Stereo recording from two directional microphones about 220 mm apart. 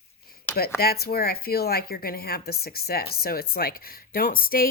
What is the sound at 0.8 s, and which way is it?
Speech, 45° left (ahead or behind).